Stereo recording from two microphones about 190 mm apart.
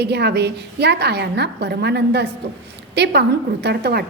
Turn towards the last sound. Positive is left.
turn(degrees=-60)  # may be behind; listen again after turning